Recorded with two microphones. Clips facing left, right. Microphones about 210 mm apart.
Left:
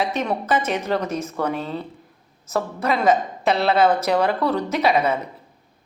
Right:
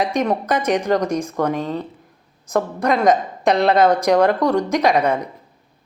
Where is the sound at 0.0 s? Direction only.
15° right (ahead or behind).